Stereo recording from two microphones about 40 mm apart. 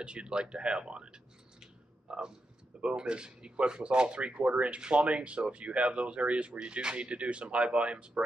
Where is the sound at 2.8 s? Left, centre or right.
Right.